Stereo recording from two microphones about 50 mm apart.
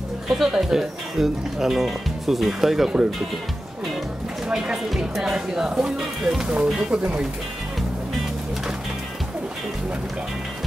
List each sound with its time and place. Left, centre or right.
0.3 s speech: centre
4.5 s speech: centre
6.5 s speech: centre